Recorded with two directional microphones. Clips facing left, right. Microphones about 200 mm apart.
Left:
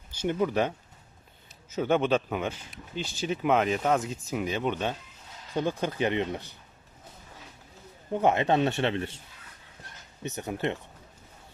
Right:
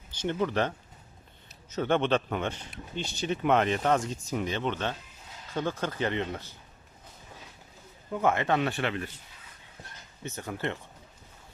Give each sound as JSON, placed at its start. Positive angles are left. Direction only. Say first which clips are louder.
{"t": 0.2, "sound": "speech", "louder": "left 2 dB", "side_deg": 10}
{"t": 1.7, "sound": "speech", "louder": "left 1 dB", "side_deg": 5}
{"t": 8.1, "sound": "speech", "louder": "left 3 dB", "side_deg": 20}
{"t": 10.2, "sound": "speech", "louder": "left 3 dB", "side_deg": 20}